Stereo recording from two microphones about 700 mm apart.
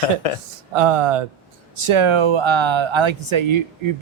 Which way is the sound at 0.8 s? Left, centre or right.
Right.